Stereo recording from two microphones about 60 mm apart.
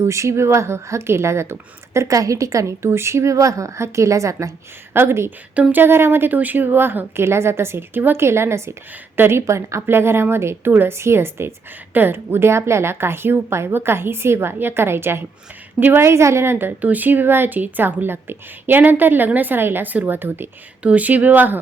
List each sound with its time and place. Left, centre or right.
0.0 s speech: right
4.9 s a woman's voice: right
5.5 s speech: right
5.8 s a woman's voice: right
16.8 s speech: right
20.8 s speech: right